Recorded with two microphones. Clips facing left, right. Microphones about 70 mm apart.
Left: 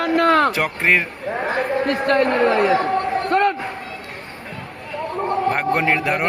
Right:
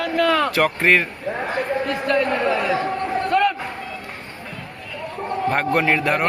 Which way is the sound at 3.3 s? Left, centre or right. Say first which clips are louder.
Left 1 dB; left.